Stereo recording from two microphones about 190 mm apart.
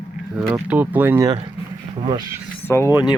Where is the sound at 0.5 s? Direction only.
10° right (ahead or behind).